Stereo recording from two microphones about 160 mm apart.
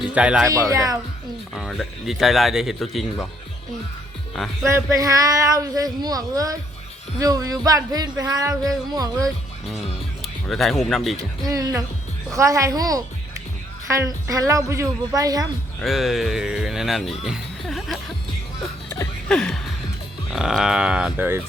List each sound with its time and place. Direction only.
0.1 s speech: 5° right (ahead or behind)
0.4 s speech: 20° right (ahead or behind)
1.5 s speech: 5° right (ahead or behind)
4.6 s speech: 20° right (ahead or behind)
9.6 s speech: centre (ahead or behind)
11.2 s speech: 25° right (ahead or behind)
15.8 s speech: centre (ahead or behind)
19.3 s a sound: 5° left (ahead or behind)
20.3 s speech: centre (ahead or behind)